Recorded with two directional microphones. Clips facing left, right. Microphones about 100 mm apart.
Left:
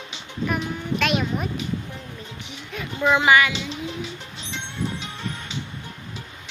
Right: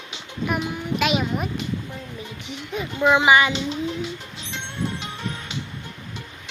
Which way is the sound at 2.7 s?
20° right (ahead or behind).